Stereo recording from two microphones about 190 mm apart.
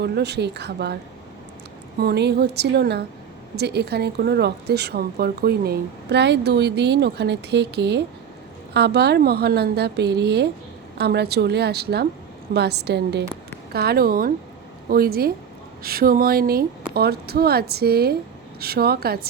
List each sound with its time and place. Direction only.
0.0 s speech: 60° right (ahead or behind)
2.0 s speech: 60° right (ahead or behind)